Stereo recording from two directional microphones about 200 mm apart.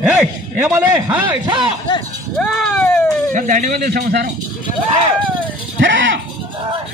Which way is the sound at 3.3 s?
40° right (ahead or behind).